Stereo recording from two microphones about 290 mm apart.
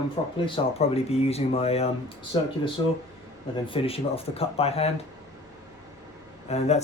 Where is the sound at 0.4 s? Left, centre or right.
Centre.